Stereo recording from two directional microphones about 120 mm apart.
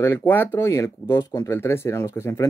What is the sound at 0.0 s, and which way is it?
Speech, 20° left (ahead or behind).